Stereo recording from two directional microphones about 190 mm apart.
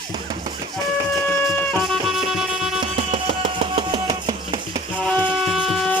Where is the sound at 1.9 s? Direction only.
Centre (ahead or behind).